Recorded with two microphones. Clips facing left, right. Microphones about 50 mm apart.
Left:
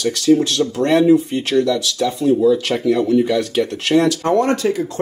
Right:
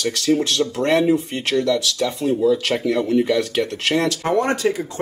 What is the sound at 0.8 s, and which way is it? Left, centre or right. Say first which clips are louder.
Speech: left 4 dB; centre.